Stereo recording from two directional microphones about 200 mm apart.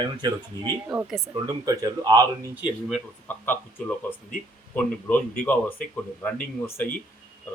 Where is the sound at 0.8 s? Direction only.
5° right (ahead or behind).